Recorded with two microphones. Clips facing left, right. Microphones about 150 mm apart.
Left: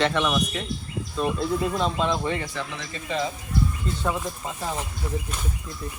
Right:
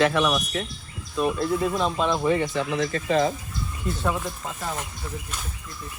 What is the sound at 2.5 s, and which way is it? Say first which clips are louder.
Speech: right 8 dB; 45° right (ahead or behind).